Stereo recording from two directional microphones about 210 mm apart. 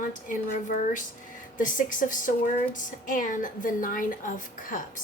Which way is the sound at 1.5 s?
40° left (ahead or behind).